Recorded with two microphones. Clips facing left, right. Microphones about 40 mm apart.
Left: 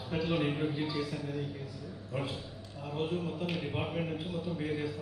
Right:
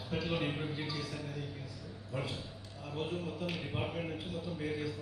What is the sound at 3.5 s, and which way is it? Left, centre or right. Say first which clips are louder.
Speech: left 3 dB; centre.